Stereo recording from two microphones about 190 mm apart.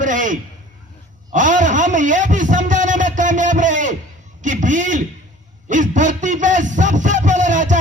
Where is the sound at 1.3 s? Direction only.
40° right (ahead or behind).